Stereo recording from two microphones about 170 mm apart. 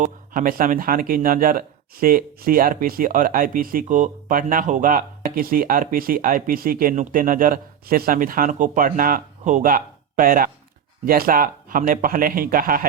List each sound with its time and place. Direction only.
0.0 s speech: 55° right (ahead or behind)